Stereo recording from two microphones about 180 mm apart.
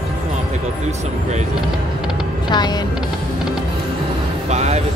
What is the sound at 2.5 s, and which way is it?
Music, 25° left (ahead or behind).